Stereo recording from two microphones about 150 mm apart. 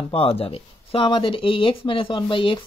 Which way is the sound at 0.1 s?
40° left (ahead or behind).